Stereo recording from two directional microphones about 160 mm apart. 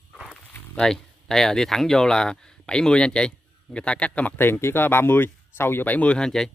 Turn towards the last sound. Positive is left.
turn(degrees=5)  # may be behind; listen again after turning